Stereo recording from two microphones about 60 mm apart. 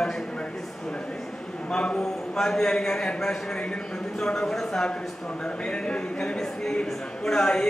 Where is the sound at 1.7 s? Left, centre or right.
Centre.